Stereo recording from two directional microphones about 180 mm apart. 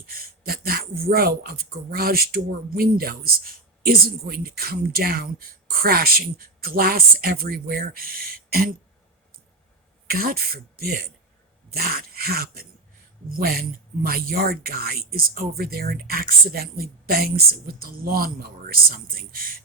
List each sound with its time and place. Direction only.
0.0 s speech: 55° right (ahead or behind)
10.1 s speech: 55° right (ahead or behind)